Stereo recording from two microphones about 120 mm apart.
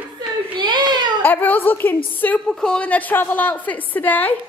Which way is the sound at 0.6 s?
40° right (ahead or behind).